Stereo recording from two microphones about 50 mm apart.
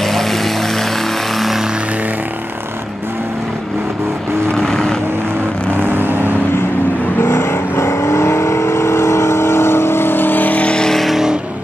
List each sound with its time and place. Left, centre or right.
0.0 s vehicle: centre
4.5 s vehicle: centre
5.7 s vehicle: right
7.2 s vehicle: left
10.7 s vehicle: centre
11.0 s vehicle: centre